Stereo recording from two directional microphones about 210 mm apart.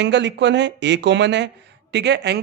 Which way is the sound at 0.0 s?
55° right (ahead or behind).